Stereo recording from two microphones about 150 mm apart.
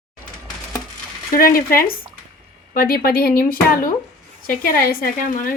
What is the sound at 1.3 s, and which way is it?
A woman's voice, 75° left (ahead or behind).